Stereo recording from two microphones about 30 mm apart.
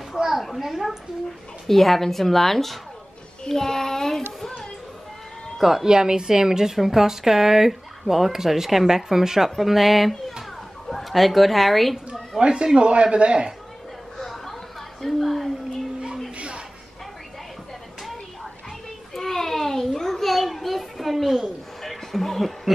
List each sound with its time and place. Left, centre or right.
0.1 s a sound: centre
0.6 s a woman's voice: centre
1.7 s a woman's voice: centre
5.6 s a woman's voice: centre
5.9 s a woman's voice: right; by 11.9 s centre
12.1 s a woman's voice: right
14.1 s chatter: centre
15.0 s a woman's voice: centre
16.3 s a sound: right
19.1 s a sound: centre
20.3 s children playing: centre
21.8 s a sound: centre